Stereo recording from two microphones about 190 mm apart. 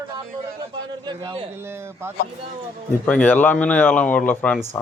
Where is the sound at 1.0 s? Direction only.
25° right (ahead or behind).